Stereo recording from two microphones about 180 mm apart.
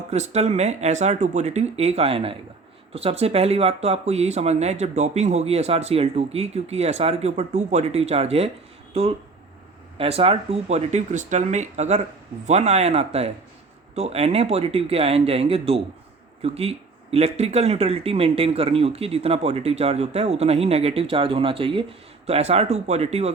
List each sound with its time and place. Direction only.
0.1 s speech: 35° right (ahead or behind)